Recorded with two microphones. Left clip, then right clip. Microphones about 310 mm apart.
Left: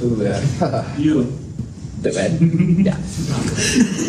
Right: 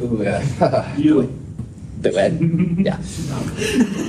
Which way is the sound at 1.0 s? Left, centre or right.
Centre.